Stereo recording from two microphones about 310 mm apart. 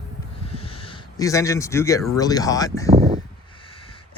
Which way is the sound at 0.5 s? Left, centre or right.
Centre.